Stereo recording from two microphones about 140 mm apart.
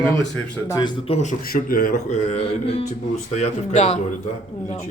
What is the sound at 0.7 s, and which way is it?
Speech, 25° left (ahead or behind).